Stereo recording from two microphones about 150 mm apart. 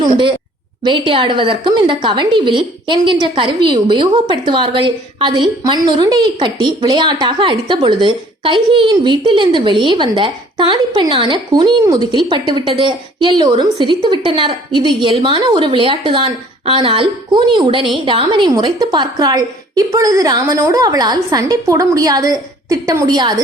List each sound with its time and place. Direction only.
0.0 s a woman's voice: 35° right (ahead or behind)